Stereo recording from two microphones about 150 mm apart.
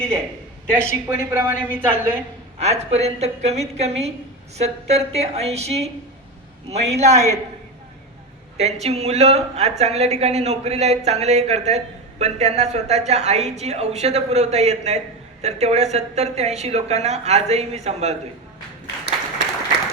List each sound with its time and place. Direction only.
0.7 s a woman's voice: 15° right (ahead or behind)
2.6 s a woman's voice: 45° right (ahead or behind)
8.5 s a woman's voice: 45° right (ahead or behind)